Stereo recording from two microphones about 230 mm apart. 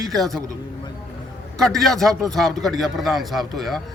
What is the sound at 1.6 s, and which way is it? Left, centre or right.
Speech, centre.